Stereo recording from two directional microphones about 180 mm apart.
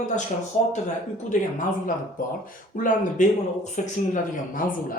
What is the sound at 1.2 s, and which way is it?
Speech, 50° left (ahead or behind).